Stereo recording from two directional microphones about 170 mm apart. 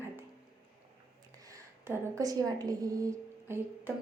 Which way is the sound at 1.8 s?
15° right (ahead or behind).